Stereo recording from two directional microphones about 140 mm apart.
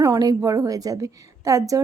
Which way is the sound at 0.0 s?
25° right (ahead or behind).